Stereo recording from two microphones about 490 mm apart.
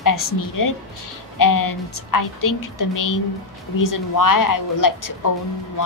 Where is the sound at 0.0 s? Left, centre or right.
Left.